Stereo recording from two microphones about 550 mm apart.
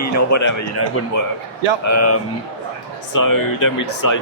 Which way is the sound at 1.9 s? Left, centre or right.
Left.